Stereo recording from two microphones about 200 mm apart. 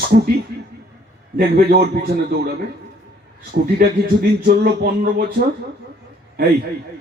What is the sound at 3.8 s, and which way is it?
A man's voice, 50° right (ahead or behind).